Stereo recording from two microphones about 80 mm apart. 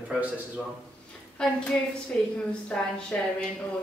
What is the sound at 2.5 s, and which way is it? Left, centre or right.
Speech, centre.